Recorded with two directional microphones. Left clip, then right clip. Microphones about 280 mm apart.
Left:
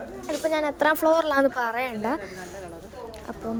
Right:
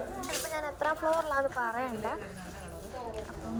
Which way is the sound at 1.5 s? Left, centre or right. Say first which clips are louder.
Left 6 dB; left.